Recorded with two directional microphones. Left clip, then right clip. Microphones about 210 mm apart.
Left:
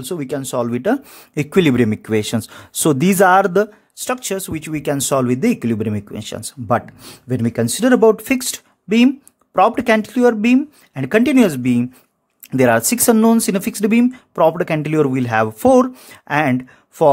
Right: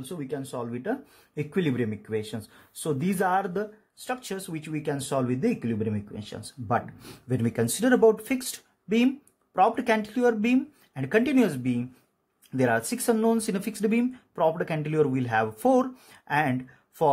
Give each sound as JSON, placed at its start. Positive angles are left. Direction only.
{"t": 0.1, "sound": "speech", "side_deg": 55}